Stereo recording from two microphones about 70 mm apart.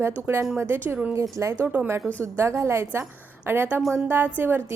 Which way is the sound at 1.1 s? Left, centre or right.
Right.